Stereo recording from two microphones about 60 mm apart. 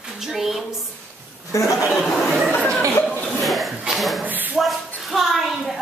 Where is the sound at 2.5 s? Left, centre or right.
Left.